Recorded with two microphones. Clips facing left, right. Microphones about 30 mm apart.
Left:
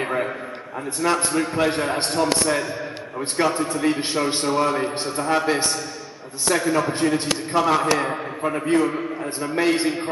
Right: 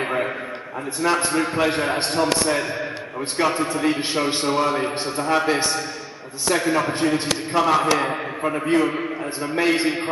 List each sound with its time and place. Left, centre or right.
0.0 s a sound: centre
1.1 s a man's voice: centre
6.9 s a man's voice: centre
8.7 s a man's voice: right
9.6 s a man's voice: centre